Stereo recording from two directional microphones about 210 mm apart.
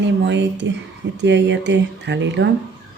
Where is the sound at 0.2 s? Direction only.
55° right (ahead or behind).